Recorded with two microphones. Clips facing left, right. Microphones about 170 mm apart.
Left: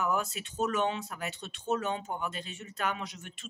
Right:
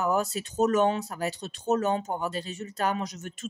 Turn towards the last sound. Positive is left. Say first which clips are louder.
# right 8 dB
turn(degrees=-40)  # may be behind; listen again after turning